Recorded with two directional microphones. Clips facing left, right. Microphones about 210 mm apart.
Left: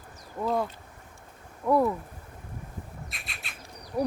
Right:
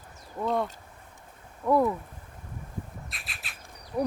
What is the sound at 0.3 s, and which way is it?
Speech, centre (ahead or behind).